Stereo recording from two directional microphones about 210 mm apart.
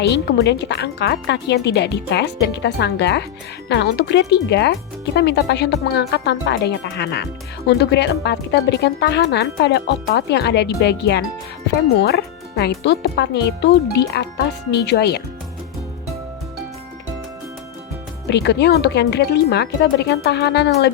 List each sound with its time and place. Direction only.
0.0 s speech: 50° left (ahead or behind)
18.3 s speech: 55° left (ahead or behind)